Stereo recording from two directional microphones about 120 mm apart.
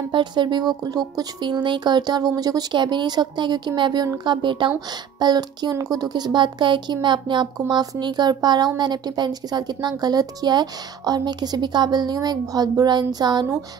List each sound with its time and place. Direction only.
0.1 s speech: 40° right (ahead or behind)
7.6 s speech: 30° right (ahead or behind)